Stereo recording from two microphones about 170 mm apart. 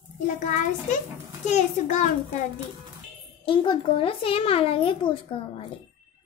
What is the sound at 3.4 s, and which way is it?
A child's voice, 30° left (ahead or behind).